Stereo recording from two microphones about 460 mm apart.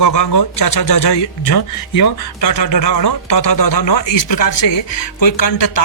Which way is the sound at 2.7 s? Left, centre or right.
Left.